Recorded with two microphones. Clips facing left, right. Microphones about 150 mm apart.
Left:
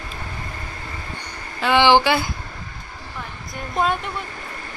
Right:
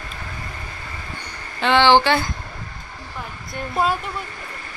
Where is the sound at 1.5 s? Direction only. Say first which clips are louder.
Even; 10° left (ahead or behind).